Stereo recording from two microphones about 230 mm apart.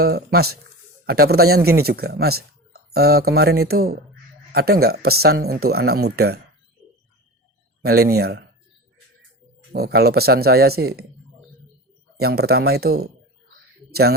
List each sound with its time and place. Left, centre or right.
0.0 s speech: right
7.8 s speech: right
9.7 s speech: right
12.2 s speech: right